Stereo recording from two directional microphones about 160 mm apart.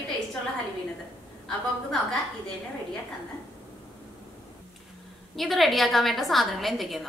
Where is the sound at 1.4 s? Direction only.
5° left (ahead or behind).